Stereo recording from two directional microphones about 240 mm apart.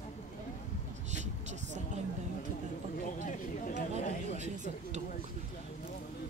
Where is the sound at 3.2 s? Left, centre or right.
Left.